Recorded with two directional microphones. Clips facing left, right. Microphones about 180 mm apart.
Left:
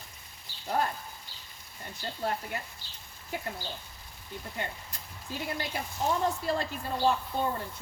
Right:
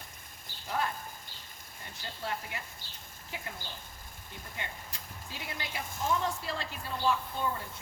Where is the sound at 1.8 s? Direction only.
45° left (ahead or behind).